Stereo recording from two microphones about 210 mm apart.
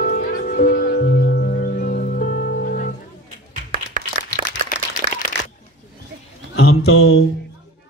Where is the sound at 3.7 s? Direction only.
40° right (ahead or behind).